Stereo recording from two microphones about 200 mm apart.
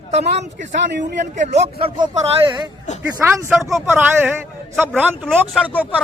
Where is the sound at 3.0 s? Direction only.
10° right (ahead or behind).